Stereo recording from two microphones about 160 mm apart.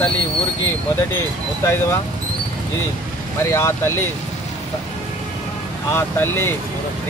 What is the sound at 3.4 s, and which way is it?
Speech, 15° left (ahead or behind).